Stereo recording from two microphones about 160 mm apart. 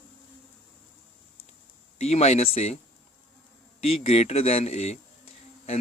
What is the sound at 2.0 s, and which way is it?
Speech, 45° left (ahead or behind).